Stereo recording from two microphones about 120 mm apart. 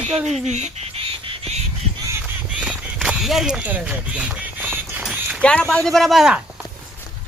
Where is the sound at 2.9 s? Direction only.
5° right (ahead or behind).